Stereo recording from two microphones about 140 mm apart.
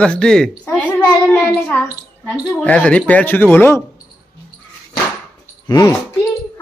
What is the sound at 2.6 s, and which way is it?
A woman's voice, 10° left (ahead or behind).